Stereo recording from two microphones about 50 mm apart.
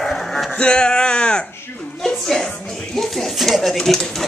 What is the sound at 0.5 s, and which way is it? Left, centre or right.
Speech, centre.